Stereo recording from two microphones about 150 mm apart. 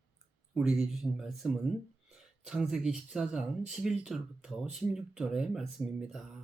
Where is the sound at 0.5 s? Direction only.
5° right (ahead or behind).